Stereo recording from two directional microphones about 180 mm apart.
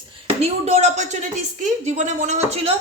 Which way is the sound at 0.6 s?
40° right (ahead or behind).